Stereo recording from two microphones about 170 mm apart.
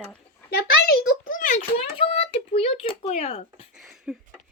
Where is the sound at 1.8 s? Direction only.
35° left (ahead or behind).